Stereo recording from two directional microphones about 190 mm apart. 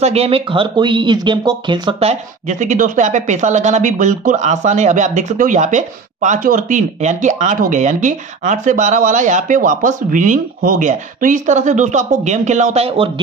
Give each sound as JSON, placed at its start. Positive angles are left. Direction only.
{"t": 0.0, "sound": "speech", "side_deg": -30}